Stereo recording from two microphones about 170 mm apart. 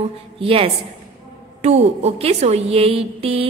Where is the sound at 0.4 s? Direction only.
35° right (ahead or behind).